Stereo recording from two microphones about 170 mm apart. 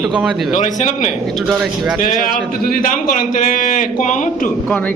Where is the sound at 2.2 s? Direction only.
55° left (ahead or behind).